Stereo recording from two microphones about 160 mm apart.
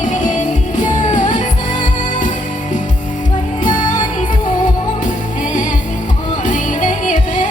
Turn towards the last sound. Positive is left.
turn(degrees=50)  # may be behind; listen again after turning